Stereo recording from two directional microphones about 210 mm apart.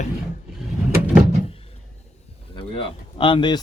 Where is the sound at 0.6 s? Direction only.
5° right (ahead or behind).